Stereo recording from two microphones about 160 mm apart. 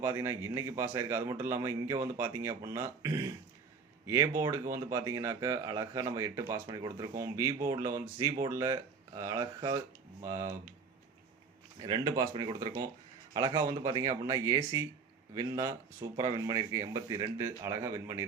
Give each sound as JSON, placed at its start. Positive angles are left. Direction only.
{"t": 0.0, "sound": "a man's voice", "side_deg": -15}
{"t": 11.8, "sound": "speech", "side_deg": -25}